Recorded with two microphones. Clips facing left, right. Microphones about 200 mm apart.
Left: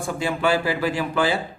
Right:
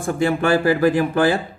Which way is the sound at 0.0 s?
55° right (ahead or behind).